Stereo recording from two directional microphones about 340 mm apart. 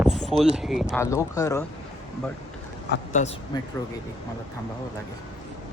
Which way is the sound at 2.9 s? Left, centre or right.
Left.